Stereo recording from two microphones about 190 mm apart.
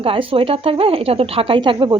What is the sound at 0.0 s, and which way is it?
A woman's voice, 30° right (ahead or behind).